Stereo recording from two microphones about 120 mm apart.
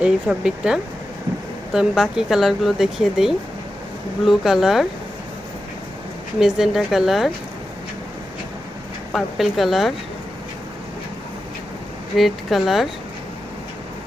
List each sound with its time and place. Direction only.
0.0 s speech: 5° right (ahead or behind)
6.4 s speech: centre (ahead or behind)
9.1 s speech: centre (ahead or behind)
12.1 s speech: centre (ahead or behind)